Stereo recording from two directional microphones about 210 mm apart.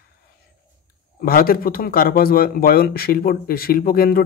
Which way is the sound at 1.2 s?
45° left (ahead or behind).